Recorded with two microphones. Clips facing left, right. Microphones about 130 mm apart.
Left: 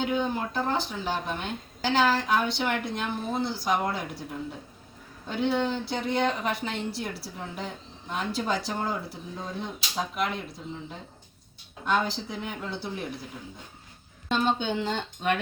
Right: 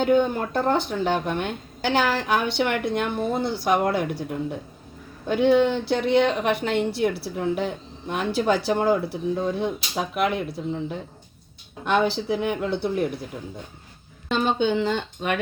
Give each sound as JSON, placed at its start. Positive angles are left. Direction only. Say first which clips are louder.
{"t": 0.0, "sound": "speech", "louder": "right 7 dB", "side_deg": -60}
{"t": 11.9, "sound": "speech", "louder": "right 6 dB", "side_deg": -70}
{"t": 14.3, "sound": "speech", "louder": "right 4 dB", "side_deg": -90}